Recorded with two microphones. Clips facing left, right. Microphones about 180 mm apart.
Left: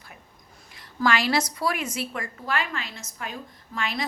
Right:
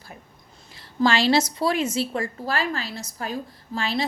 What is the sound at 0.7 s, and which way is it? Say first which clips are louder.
A woman's voice: right 3 dB; 30° right (ahead or behind).